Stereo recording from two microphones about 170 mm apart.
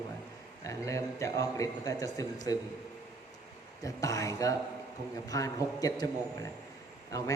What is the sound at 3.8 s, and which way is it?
Mantra, 20° left (ahead or behind).